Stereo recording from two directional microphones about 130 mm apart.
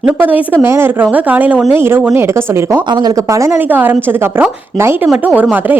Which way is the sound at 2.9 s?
35° right (ahead or behind).